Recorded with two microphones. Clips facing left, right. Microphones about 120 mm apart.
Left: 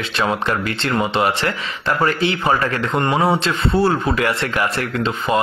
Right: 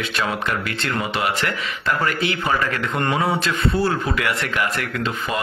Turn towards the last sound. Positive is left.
turn(degrees=30)  # may be behind; listen again after turning